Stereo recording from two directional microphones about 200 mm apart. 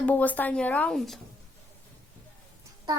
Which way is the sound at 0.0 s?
10° left (ahead or behind).